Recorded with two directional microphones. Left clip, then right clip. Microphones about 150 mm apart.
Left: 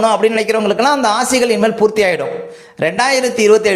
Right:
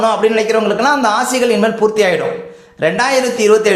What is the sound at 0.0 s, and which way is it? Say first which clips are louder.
A man's voice: even; 30° left (ahead or behind).